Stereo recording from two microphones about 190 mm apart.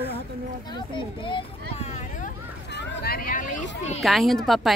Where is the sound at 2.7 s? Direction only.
55° left (ahead or behind).